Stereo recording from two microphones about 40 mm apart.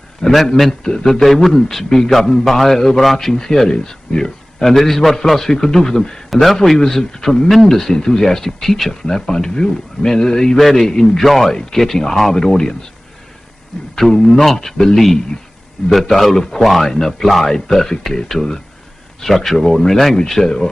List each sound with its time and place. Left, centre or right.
0.2 s a man's voice: left
1.2 s a man's voice: centre
3.3 s a man's voice: centre
6.3 s a man's voice: centre
9.0 s a man's voice: centre
13.9 s a man's voice: centre
19.2 s a man's voice: centre